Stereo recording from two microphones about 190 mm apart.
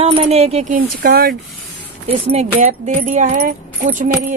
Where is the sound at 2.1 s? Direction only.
35° right (ahead or behind).